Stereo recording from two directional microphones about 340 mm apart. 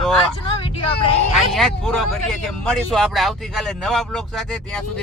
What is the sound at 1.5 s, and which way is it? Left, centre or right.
Speech, centre.